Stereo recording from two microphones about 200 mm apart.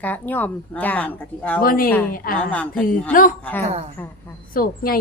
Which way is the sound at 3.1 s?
45° left (ahead or behind).